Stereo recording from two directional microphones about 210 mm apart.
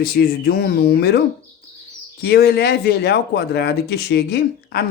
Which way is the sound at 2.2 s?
50° left (ahead or behind).